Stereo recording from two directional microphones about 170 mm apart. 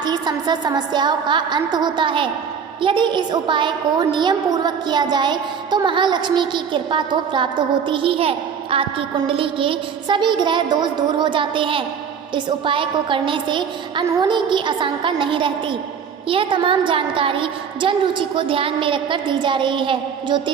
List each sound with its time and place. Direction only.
0.0 s a woman's voice: 25° right (ahead or behind)